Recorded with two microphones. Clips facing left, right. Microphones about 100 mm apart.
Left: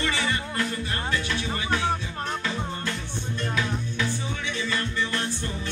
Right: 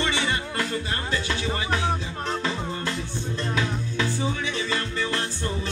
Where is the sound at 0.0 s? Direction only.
25° right (ahead or behind).